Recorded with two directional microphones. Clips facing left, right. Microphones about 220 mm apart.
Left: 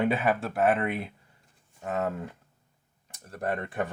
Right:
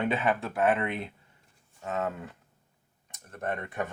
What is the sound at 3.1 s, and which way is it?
Speech, 35° left (ahead or behind).